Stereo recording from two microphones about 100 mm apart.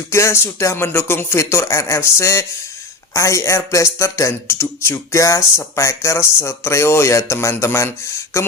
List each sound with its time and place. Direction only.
0.1 s speech: 30° left (ahead or behind)